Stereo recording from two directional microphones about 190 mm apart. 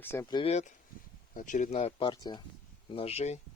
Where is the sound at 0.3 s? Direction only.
35° left (ahead or behind).